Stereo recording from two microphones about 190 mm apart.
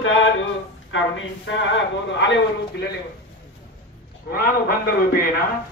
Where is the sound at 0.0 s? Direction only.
90° left.